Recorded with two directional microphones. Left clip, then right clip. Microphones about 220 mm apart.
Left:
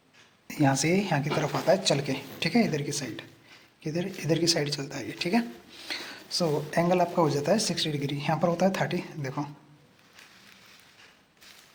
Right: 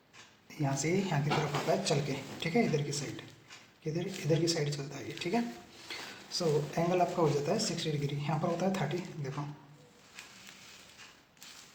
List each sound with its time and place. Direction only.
0.4 s speech: 50° left (ahead or behind)